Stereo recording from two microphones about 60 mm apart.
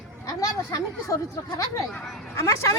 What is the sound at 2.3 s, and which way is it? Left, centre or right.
Speech, left.